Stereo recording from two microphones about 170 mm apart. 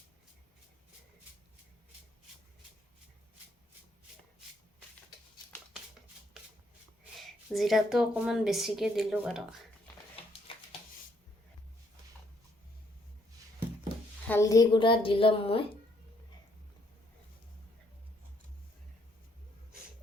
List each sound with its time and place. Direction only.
7.2 s a woman's voice: centre (ahead or behind)
10.5 s a sound: 30° left (ahead or behind)
14.3 s a woman's voice: 15° left (ahead or behind); by 15.8 s 35° left (ahead or behind)